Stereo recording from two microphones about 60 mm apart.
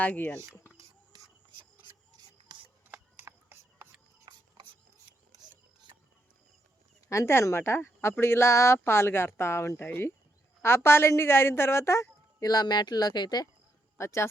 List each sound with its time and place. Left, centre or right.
0.0 s speech: left
2.5 s a sound: right
3.2 s a sound: right
7.1 s speech: left
12.4 s speech: left
14.0 s speech: left